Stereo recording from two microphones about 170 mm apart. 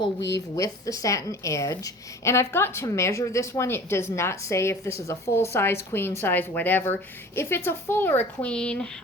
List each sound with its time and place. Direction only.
0.2 s speech: 90° left
0.5 s a woman's voice: 20° left (ahead or behind)